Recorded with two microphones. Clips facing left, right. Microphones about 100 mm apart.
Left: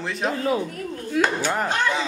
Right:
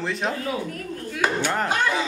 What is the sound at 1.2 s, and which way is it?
Chop, 30° left (ahead or behind).